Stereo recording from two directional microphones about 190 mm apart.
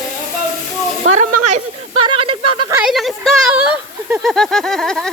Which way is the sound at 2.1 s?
30° right (ahead or behind).